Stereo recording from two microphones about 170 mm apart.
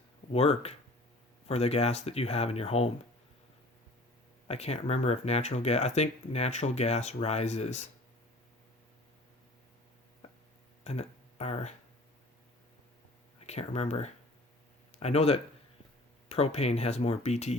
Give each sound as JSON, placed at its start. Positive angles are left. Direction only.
{"t": 0.3, "sound": "speech", "side_deg": 35}
{"t": 4.4, "sound": "speech", "side_deg": 35}
{"t": 10.8, "sound": "speech", "side_deg": 40}
{"t": 13.4, "sound": "speech", "side_deg": 40}